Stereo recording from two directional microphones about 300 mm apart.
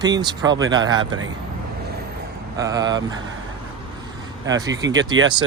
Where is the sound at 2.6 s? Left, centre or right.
Centre.